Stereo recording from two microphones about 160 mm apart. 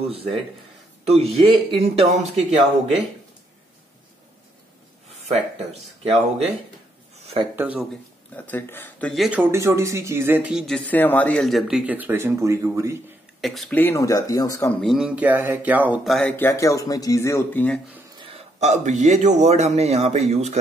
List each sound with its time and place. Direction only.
1.0 s speech: 40° right (ahead or behind)
5.3 s speech: 40° right (ahead or behind)
7.5 s speech: 10° right (ahead or behind)
8.4 s speech: 10° left (ahead or behind)
9.1 s speech: centre (ahead or behind)
9.4 s speech: 15° right (ahead or behind)
10.7 s speech: 10° left (ahead or behind); by 13.0 s 15° right (ahead or behind)
13.4 s speech: centre (ahead or behind)
13.7 s speech: 15° left (ahead or behind)
14.8 s speech: centre (ahead or behind)
16.3 s speech: 15° left (ahead or behind)
18.1 s a man's voice: 35° right (ahead or behind)